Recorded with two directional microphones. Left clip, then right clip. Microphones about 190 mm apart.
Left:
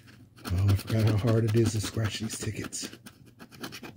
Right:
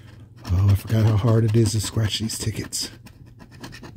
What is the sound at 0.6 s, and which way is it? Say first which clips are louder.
Speech: right 5 dB; 35° right (ahead or behind).